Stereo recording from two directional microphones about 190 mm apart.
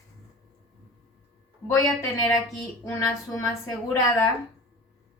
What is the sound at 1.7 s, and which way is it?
A woman's voice, 15° left (ahead or behind).